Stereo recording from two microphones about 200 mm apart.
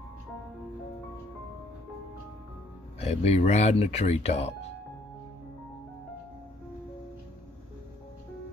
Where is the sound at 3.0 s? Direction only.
30° left (ahead or behind).